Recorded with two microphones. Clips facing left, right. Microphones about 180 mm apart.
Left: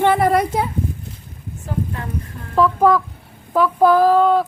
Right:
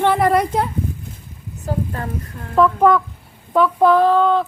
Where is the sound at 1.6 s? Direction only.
45° right (ahead or behind).